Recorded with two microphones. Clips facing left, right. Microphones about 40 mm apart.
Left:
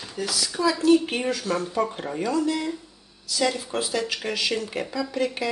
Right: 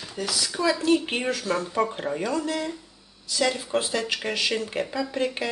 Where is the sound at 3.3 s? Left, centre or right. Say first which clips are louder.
Right 1 dB; centre.